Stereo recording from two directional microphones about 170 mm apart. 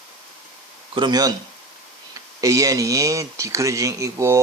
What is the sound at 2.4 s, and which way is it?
Speech, 20° right (ahead or behind).